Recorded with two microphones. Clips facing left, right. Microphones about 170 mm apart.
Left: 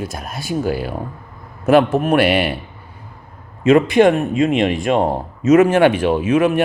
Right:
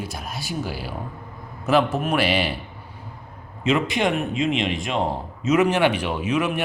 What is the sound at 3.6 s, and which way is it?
Speech, 50° left (ahead or behind).